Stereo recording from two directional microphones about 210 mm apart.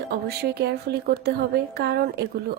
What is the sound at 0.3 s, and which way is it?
A woman's voice, 50° right (ahead or behind).